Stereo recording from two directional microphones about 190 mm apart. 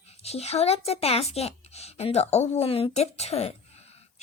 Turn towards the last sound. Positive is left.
turn(degrees=35)  # may be behind; listen again after turning